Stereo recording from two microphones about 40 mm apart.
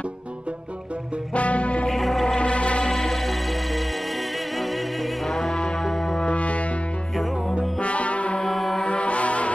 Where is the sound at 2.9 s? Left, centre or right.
Centre.